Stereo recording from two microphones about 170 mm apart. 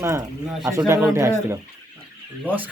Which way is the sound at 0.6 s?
15° right (ahead or behind).